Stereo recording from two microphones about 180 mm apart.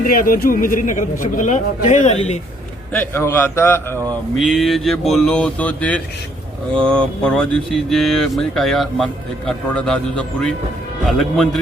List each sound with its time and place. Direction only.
0.0 s a man's voice: 50° left (ahead or behind)
2.9 s a man's voice: 10° left (ahead or behind)
4.4 s speech: centre (ahead or behind)